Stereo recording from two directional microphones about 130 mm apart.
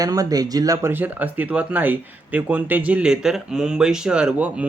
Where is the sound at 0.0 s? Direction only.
30° right (ahead or behind).